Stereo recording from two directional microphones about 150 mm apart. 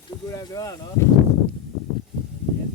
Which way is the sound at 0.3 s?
25° left (ahead or behind).